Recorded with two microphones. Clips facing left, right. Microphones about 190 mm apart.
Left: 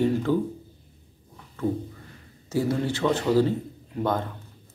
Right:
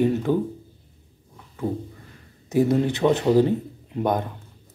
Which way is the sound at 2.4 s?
20° right (ahead or behind).